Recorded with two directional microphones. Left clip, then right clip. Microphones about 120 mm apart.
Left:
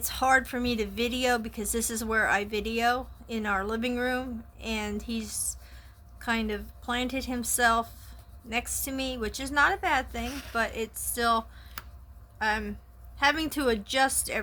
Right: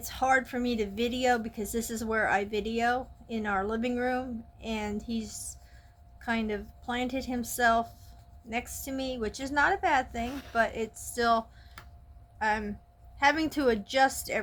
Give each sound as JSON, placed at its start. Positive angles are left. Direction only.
{"t": 0.0, "sound": "a woman's voice", "side_deg": 35}